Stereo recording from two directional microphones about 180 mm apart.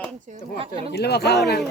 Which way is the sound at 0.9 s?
65° left (ahead or behind).